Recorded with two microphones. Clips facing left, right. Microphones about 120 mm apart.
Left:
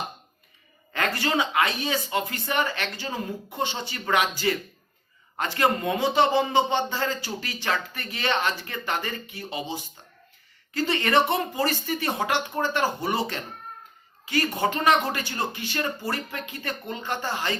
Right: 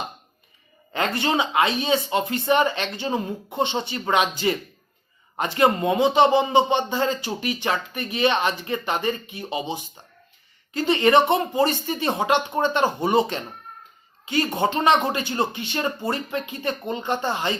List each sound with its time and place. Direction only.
0.9 s speech: 25° right (ahead or behind)